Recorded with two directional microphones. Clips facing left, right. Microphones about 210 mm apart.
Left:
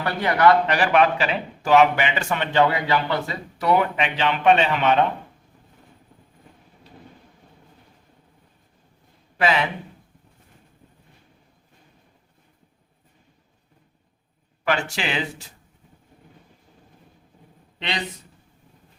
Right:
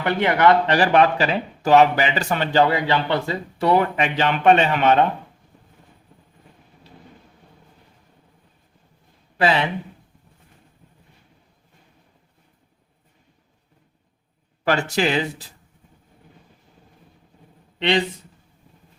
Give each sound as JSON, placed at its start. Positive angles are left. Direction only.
{"t": 0.0, "sound": "speech", "side_deg": -20}
{"t": 9.4, "sound": "speech", "side_deg": -35}
{"t": 14.6, "sound": "speech", "side_deg": -40}
{"t": 17.7, "sound": "speech", "side_deg": -30}